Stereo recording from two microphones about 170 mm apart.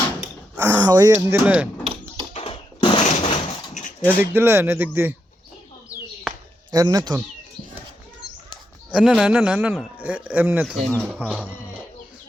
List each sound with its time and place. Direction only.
0.5 s a sound: 10° right (ahead or behind)
0.8 s speech: 20° right (ahead or behind)
2.3 s a sound: 35° left (ahead or behind)
3.0 s breaking: 45° left (ahead or behind)
4.0 s speech: 10° right (ahead or behind)
6.7 s speech: 20° right (ahead or behind)
8.9 s speech: 5° right (ahead or behind)